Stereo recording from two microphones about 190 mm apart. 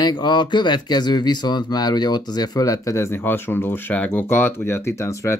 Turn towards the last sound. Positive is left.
turn(degrees=15)  # may be behind; listen again after turning